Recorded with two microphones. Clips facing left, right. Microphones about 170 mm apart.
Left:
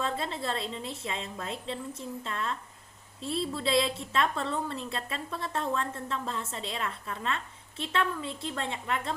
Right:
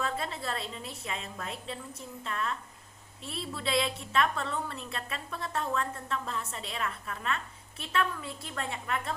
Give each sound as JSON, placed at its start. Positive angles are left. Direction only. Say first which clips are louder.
{"t": 0.0, "sound": "a woman's voice", "louder": "left 2 dB", "side_deg": 25}